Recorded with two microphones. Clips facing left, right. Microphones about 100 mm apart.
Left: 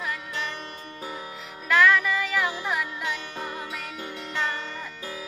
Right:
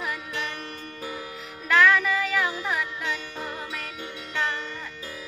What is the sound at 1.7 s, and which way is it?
Music, centre (ahead or behind).